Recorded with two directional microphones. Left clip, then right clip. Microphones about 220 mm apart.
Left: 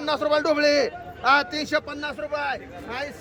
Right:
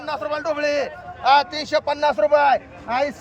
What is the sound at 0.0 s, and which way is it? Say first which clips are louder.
A man's voice: left 3 dB; 25° left (ahead or behind).